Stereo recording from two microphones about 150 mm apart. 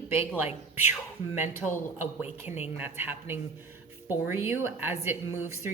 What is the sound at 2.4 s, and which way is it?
Speech, 50° left (ahead or behind).